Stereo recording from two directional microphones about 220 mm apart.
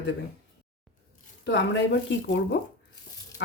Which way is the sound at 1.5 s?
55° left (ahead or behind).